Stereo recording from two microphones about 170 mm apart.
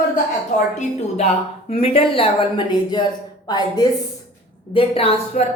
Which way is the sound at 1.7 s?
35° left (ahead or behind).